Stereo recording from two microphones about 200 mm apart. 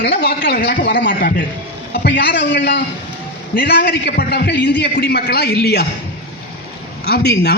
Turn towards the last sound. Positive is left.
turn(degrees=55)  # may be behind; listen again after turning